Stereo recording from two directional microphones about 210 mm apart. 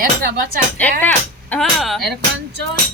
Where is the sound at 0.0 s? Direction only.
45° right (ahead or behind).